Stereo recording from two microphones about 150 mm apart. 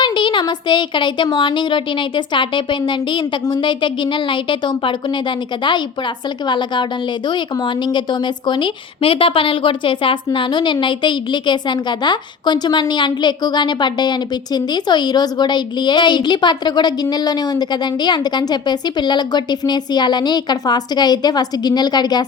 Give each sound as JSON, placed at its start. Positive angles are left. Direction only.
{"t": 0.0, "sound": "a woman's voice", "side_deg": 30}